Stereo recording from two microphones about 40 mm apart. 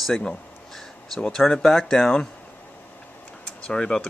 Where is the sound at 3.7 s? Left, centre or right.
Centre.